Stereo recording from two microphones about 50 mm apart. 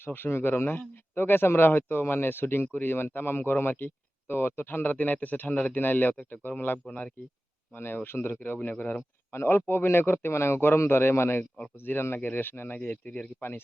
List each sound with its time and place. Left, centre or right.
0.0 s a man's voice: left
6.8 s speech: centre
7.7 s a man's voice: left
8.7 s speech: left
9.3 s a man's voice: left
11.8 s a man's voice: left
12.8 s speech: left